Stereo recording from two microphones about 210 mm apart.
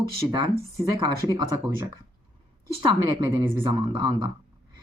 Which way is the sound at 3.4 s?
20° right (ahead or behind).